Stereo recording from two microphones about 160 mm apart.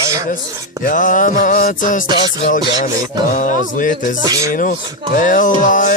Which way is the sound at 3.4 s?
55° left (ahead or behind).